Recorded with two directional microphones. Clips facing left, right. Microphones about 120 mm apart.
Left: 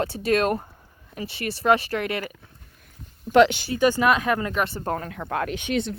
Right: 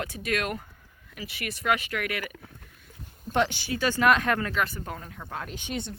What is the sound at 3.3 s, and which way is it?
Speech, 80° left.